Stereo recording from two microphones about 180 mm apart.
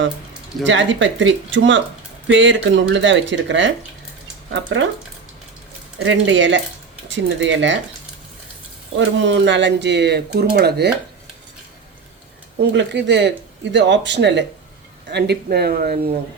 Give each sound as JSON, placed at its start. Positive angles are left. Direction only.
{"t": 0.6, "sound": "speech", "side_deg": -90}
{"t": 6.1, "sound": "speech", "side_deg": -90}
{"t": 9.0, "sound": "speech", "side_deg": -85}
{"t": 12.7, "sound": "speech", "side_deg": -75}